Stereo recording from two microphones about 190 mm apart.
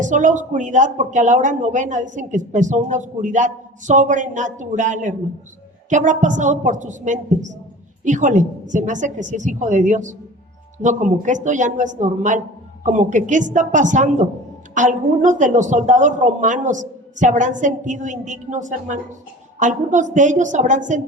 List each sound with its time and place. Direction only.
0.0 s speech: 40° right (ahead or behind)